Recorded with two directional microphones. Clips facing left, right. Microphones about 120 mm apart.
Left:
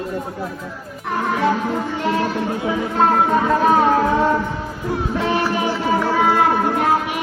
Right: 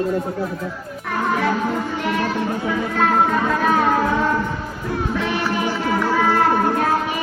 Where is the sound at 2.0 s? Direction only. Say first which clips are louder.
Left 1 dB; 30° left (ahead or behind).